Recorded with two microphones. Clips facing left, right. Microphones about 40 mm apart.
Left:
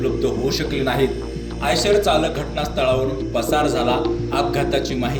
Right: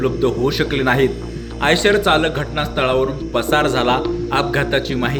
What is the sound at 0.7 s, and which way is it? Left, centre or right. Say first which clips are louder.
Speech: right 3 dB; right.